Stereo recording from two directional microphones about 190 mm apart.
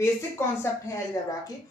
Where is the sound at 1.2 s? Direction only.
15° left (ahead or behind).